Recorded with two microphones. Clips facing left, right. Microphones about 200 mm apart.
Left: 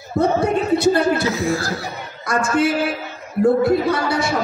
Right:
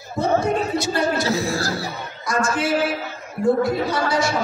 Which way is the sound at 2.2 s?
60° left (ahead or behind).